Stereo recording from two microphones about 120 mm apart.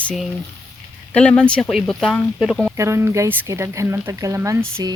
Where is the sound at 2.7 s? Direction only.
25° right (ahead or behind).